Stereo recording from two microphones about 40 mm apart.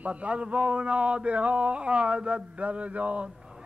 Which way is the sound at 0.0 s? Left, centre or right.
Right.